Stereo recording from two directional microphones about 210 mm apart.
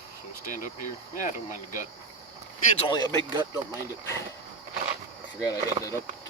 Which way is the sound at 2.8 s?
20° left (ahead or behind).